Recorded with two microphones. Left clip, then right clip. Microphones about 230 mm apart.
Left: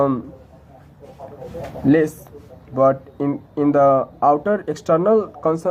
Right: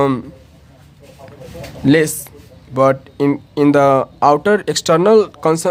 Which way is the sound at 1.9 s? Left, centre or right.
Right.